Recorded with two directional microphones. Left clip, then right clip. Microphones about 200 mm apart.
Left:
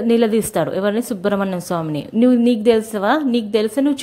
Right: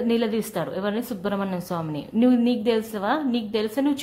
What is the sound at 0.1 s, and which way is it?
A woman's voice, 30° left (ahead or behind).